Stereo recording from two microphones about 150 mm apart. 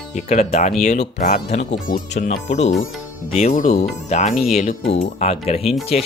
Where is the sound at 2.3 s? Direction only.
50° left (ahead or behind).